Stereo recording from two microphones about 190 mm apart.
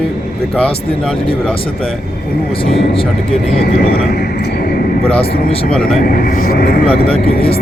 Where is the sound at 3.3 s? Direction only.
Centre (ahead or behind).